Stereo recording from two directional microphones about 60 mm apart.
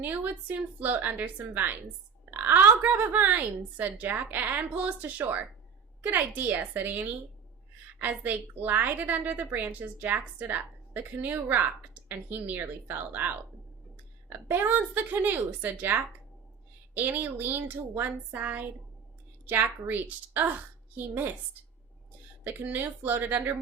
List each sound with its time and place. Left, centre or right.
0.0 s a woman's voice: right
14.3 s a woman's voice: right
19.5 s a woman's voice: right
22.4 s a woman's voice: right